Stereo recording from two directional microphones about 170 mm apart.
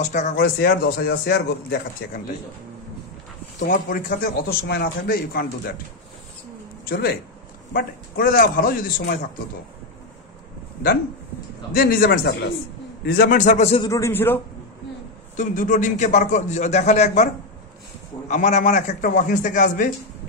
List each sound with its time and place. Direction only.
0.0 s a man's voice: 45° left (ahead or behind)
0.6 s a man's voice: 65° left (ahead or behind)
3.6 s a man's voice: 60° left (ahead or behind)
6.8 s a man's voice: 65° left (ahead or behind)
11.7 s a man's voice: 60° left (ahead or behind); by 13.8 s 40° left (ahead or behind)
13.8 s a man's voice: 15° left (ahead or behind)
15.3 s a man's voice: 50° left (ahead or behind)
18.3 s a man's voice: 45° left (ahead or behind)